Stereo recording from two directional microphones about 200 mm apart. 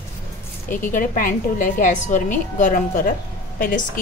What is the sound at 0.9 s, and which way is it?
A woman's voice, 40° left (ahead or behind).